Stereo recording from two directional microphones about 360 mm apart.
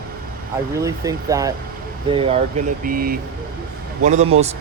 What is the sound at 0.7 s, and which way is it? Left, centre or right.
Speech, centre.